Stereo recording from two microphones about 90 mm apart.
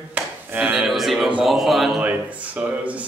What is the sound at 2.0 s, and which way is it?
A man's voice, 15° right (ahead or behind).